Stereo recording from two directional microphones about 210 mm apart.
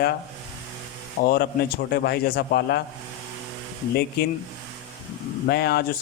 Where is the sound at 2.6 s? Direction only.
50° left (ahead or behind).